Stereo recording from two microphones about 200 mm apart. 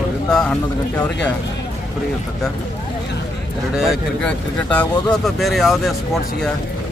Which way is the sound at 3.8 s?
Centre (ahead or behind).